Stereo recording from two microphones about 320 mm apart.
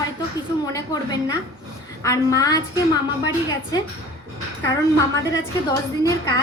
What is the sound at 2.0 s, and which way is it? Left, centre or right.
Speech, centre.